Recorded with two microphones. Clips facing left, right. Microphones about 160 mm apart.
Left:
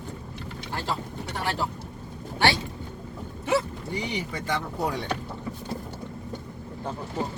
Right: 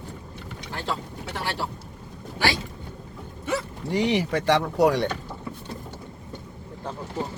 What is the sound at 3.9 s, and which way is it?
Speech, 85° right.